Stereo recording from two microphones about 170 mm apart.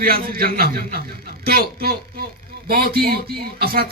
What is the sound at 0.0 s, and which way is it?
A man's voice, 60° right (ahead or behind).